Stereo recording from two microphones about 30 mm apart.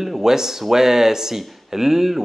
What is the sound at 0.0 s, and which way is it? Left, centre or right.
Speech, centre.